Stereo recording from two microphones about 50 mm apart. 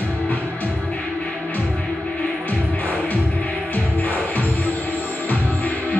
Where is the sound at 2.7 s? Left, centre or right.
Left.